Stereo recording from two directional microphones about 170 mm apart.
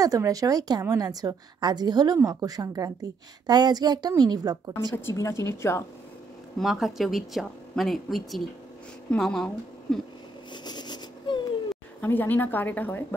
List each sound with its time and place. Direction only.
0.0 s a woman's voice: 20° right (ahead or behind)
4.9 s speech: 15° left (ahead or behind)
6.6 s speech: centre (ahead or behind)
10.5 s a sound: 25° left (ahead or behind)
12.0 s speech: 10° left (ahead or behind)